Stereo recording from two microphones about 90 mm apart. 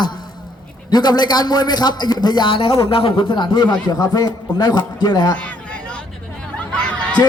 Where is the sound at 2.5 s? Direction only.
80° left; by 5.3 s 50° left (ahead or behind).